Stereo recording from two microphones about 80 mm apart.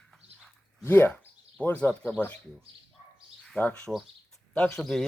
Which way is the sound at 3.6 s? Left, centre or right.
Centre.